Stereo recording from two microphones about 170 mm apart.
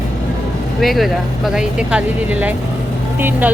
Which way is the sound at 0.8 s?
Centre (ahead or behind).